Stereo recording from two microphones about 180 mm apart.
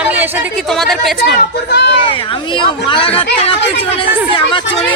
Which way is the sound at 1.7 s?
70° left (ahead or behind).